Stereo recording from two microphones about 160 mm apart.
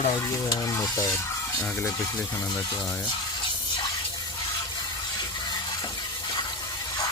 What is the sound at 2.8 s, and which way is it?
Speech, 5° left (ahead or behind).